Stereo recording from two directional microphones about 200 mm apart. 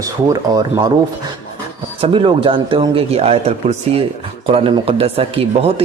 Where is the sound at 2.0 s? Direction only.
25° right (ahead or behind).